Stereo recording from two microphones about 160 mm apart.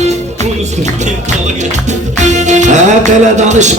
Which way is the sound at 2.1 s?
50° right (ahead or behind).